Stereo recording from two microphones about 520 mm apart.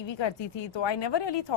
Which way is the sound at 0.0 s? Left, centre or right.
Left.